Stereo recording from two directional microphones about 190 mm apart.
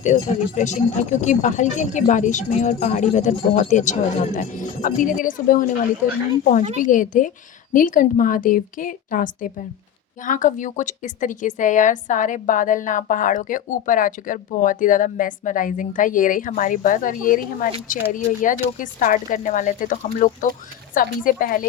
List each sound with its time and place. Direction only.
0.0 s a woman's voice: 40° left (ahead or behind)
6.7 s a woman's voice: 45° left (ahead or behind)